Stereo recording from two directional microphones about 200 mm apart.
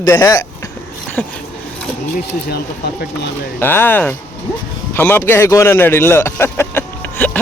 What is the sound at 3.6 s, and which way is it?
Speech, 10° left (ahead or behind).